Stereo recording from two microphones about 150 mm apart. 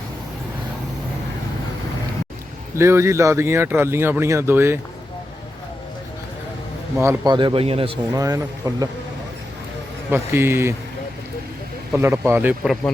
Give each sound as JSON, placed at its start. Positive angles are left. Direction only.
{"t": 2.7, "sound": "speech", "side_deg": -20}
{"t": 6.9, "sound": "speech", "side_deg": -15}
{"t": 7.3, "sound": "a man's voice", "side_deg": -35}
{"t": 8.1, "sound": "speech", "side_deg": -20}
{"t": 10.1, "sound": "speech", "side_deg": -15}
{"t": 11.9, "sound": "speech", "side_deg": -15}